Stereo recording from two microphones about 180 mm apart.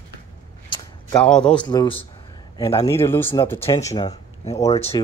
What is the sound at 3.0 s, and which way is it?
Speech, 15° left (ahead or behind).